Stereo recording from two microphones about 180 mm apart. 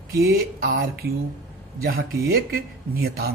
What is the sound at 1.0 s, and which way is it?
Speech, 55° right (ahead or behind).